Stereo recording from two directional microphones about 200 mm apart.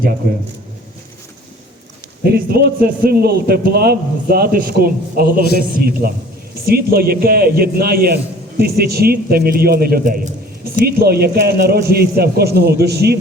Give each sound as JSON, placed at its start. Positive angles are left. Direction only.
{"t": 2.2, "sound": "a man's voice", "side_deg": -50}